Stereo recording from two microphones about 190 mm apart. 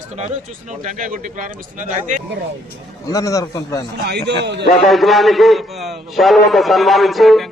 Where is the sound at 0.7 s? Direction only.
40° right (ahead or behind).